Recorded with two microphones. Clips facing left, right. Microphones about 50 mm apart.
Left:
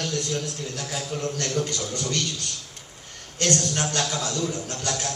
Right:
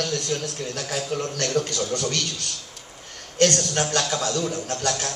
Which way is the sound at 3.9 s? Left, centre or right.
Right.